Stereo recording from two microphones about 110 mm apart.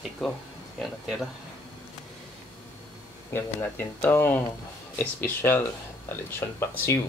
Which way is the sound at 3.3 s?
20° left (ahead or behind).